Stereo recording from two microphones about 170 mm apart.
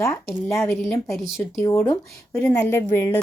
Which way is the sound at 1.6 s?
15° left (ahead or behind).